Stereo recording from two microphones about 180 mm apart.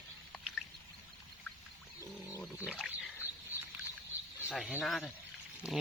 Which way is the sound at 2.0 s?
15° left (ahead or behind).